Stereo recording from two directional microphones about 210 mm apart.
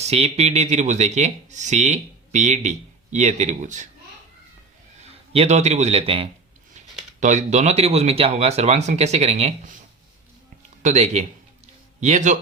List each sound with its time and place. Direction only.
0.0 s speech: 30° right (ahead or behind)
5.3 s a man's voice: 30° right (ahead or behind)
10.8 s a sound: 35° right (ahead or behind)